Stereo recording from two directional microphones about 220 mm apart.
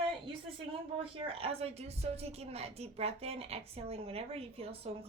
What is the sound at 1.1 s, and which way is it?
A woman's voice, 25° right (ahead or behind).